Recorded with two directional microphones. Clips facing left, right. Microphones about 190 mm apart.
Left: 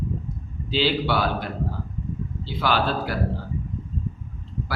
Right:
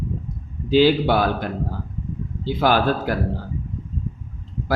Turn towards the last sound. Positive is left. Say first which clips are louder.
# right 4 dB
turn(degrees=-50)  # may be behind; listen again after turning